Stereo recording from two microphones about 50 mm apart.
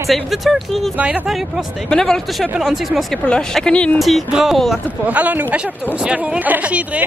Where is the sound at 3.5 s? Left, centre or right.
Centre.